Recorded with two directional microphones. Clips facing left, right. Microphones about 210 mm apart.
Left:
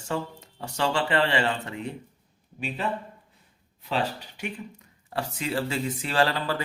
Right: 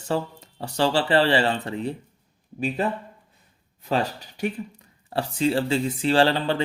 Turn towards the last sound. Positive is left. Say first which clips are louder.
# right 5 dB
turn(degrees=-30)  # may be behind; listen again after turning